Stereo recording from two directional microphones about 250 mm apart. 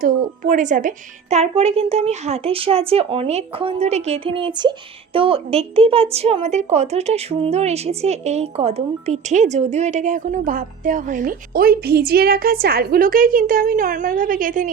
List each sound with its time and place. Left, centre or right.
0.0 s a woman's voice: right